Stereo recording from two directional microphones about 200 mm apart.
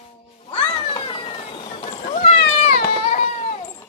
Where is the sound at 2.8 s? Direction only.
25° left (ahead or behind).